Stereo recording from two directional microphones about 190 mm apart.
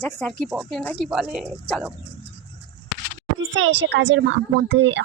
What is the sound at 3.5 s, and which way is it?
A woman's voice, 75° right (ahead or behind).